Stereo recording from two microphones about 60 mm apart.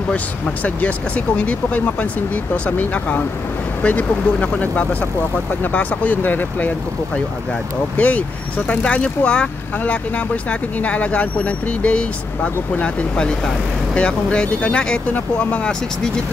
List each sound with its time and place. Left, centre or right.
0.7 s speech: left
8.0 s speech: left